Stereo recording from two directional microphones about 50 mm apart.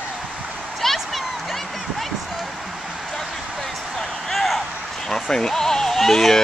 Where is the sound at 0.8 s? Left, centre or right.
Centre.